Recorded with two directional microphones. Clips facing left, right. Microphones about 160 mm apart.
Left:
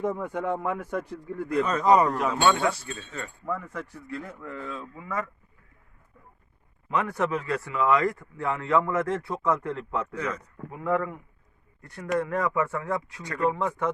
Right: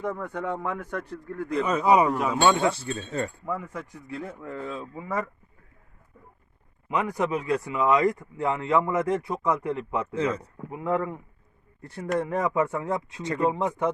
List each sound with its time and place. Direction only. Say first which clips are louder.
0.0 s speech: left 2 dB; 15° left (ahead or behind)
1.6 s speech: right 1 dB; 10° right (ahead or behind); by 2.9 s 25° right (ahead or behind)
2.9 s speech: right 7 dB; 35° right (ahead or behind)
3.4 s speech: even; 10° right (ahead or behind)
4.0 s speech: right 1 dB; 25° right (ahead or behind)
6.8 s speech: even; 15° right (ahead or behind)
10.2 s speech: right 5 dB; 30° right (ahead or behind)